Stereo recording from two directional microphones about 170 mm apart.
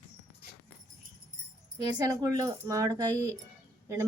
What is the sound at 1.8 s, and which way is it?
A woman's voice, 20° right (ahead or behind).